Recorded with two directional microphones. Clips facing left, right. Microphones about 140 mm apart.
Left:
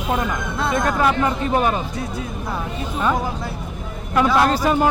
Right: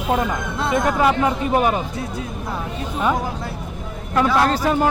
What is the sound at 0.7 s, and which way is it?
Speech, 20° right (ahead or behind).